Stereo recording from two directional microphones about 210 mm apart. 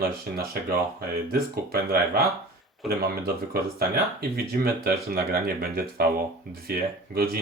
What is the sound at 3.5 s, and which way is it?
Speech, 45° right (ahead or behind).